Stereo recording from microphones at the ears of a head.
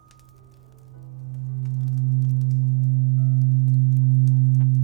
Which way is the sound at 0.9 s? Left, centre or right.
Right.